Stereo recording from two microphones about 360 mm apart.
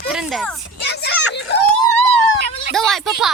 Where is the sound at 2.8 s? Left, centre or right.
Centre.